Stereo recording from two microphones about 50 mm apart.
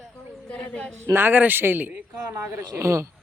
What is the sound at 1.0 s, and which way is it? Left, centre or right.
Speech, right.